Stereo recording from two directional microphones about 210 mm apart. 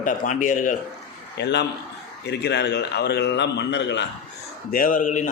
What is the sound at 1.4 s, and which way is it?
Speech, 55° left (ahead or behind).